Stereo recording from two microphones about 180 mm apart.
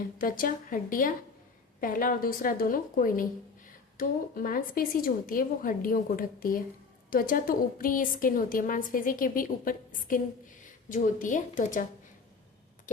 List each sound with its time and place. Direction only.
0.2 s a woman's voice: 50° left (ahead or behind)